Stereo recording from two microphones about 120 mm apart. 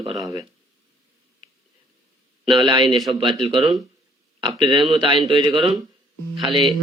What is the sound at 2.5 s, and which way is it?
Speech, 40° right (ahead or behind).